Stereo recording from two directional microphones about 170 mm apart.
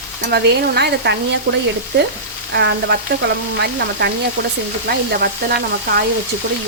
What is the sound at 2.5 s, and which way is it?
Speech, 80° right.